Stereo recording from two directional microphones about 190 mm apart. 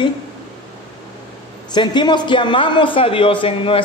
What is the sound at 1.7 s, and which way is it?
A man's voice, 25° left (ahead or behind).